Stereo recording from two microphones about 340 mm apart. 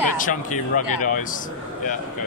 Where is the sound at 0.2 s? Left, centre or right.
Left.